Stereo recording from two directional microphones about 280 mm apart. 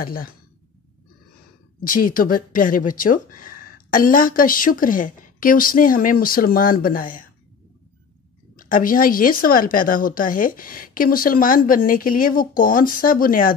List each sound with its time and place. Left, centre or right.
0.0 s speech: left
1.9 s speech: left
8.5 s speech: left